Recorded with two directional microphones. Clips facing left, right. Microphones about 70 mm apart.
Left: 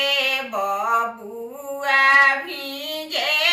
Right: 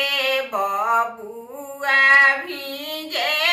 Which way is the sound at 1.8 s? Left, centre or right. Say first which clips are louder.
Right 1 dB; right.